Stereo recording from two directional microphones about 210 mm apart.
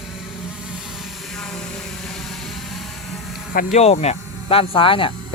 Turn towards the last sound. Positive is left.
turn(degrees=25)  # may be behind; listen again after turning